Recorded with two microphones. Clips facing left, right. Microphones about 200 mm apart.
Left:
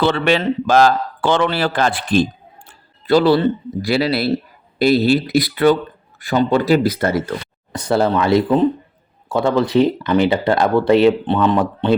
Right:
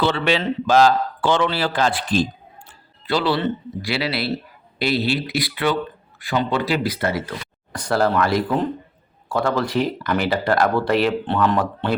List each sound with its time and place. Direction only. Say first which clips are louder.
0.0 s speech: left 4 dB; 50° left (ahead or behind)
2.6 s music: left 8 dB; 45° left (ahead or behind)
4.8 s speech: left 7 dB; 45° left (ahead or behind)
7.7 s speech: left 3 dB; 25° left (ahead or behind)